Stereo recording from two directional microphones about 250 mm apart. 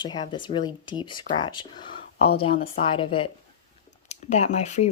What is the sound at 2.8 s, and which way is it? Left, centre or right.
Speech, left.